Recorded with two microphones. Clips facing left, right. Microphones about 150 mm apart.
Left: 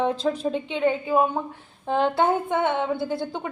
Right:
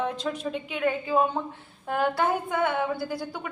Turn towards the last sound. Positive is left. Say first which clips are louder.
# left 4 dB
turn(degrees=25)  # may be behind; listen again after turning